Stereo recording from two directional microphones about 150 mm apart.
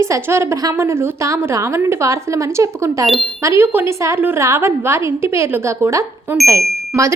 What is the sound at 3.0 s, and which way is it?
Speech, centre (ahead or behind).